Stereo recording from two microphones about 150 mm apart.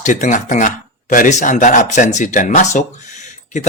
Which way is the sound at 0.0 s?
55° left (ahead or behind).